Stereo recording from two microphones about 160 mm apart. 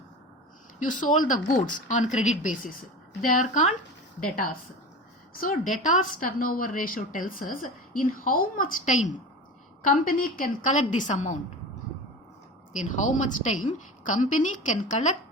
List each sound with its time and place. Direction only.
0.9 s a woman's voice: 55° left (ahead or behind)
5.3 s a woman's voice: 60° left (ahead or behind)
12.7 s a woman's voice: 50° left (ahead or behind)